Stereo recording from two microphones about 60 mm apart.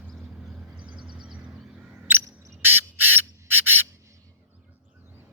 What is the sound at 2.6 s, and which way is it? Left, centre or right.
Owl, right.